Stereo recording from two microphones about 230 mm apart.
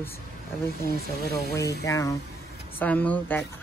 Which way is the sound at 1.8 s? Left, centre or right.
Centre.